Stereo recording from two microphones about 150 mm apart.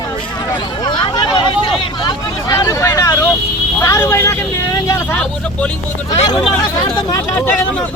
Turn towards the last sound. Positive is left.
turn(degrees=15)  # may be behind; listen again after turning